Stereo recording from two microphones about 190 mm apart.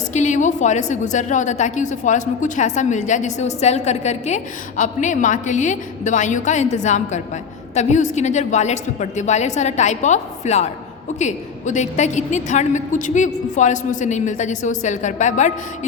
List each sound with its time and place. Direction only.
0.1 s a woman's voice: 40° left (ahead or behind)